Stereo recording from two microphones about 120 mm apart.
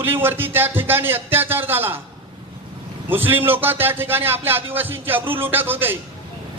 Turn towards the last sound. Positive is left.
turn(degrees=-15)  # may be behind; listen again after turning